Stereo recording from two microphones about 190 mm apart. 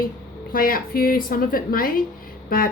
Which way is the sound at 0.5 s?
50° left (ahead or behind).